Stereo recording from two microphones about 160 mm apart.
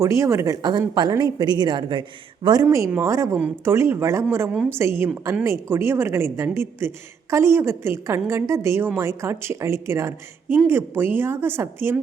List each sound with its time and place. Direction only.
0.0 s speech: 20° right (ahead or behind)
2.6 s a woman's voice: 15° right (ahead or behind)